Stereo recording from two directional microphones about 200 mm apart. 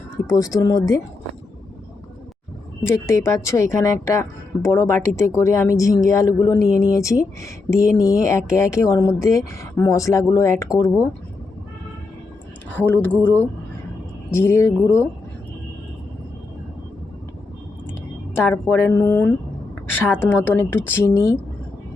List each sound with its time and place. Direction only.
0.3 s a woman's voice: 15° left (ahead or behind)
3.1 s a woman's voice: 15° left (ahead or behind)
12.7 s a woman's voice: 10° left (ahead or behind)
18.3 s a woman's voice: 10° left (ahead or behind)